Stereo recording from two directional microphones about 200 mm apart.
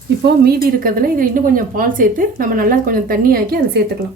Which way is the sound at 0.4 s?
45° right (ahead or behind).